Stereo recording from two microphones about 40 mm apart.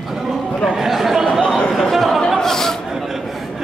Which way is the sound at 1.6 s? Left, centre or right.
Centre.